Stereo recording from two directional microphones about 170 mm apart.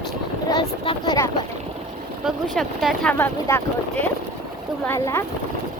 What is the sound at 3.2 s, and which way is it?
Speech, 15° left (ahead or behind).